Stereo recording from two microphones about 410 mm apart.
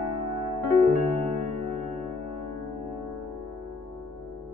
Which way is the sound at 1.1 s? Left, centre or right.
Centre.